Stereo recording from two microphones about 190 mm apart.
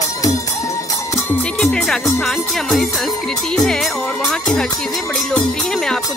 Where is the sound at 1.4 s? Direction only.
5° left (ahead or behind).